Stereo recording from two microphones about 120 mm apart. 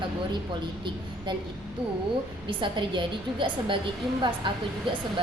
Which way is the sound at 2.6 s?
40° right (ahead or behind).